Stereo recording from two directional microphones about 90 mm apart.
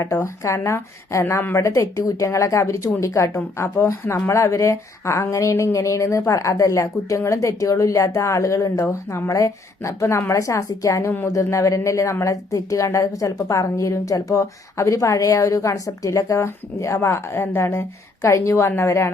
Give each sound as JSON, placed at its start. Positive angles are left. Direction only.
{"t": 0.0, "sound": "a woman's voice", "side_deg": 35}